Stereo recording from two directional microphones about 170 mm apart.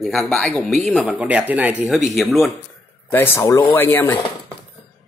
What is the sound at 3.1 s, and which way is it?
A man's voice, 15° left (ahead or behind).